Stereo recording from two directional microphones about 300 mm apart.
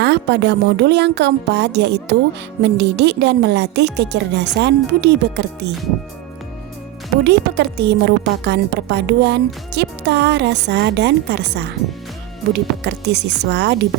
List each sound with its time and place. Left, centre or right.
0.0 s a woman's voice: right
7.3 s a woman's voice: right